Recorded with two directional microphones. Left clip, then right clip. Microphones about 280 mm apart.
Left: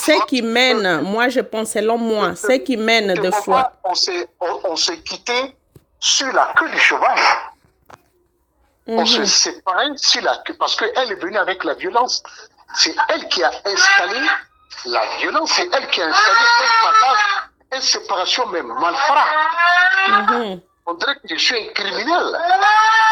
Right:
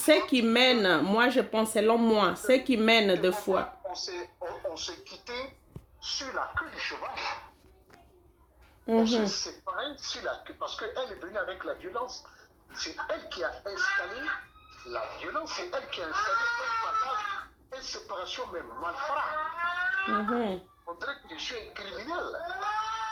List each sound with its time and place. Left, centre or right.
0.0 s speech: left
8.9 s speech: left